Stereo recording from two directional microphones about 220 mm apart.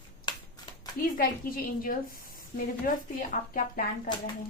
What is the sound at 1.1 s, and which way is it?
A woman's voice, 40° left (ahead or behind).